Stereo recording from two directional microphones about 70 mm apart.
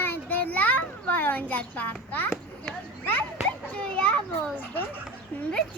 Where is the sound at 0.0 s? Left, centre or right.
Left.